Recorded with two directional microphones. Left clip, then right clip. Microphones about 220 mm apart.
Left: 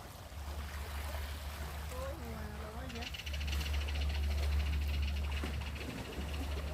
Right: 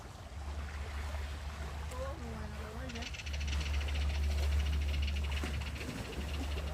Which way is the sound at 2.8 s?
25° right (ahead or behind).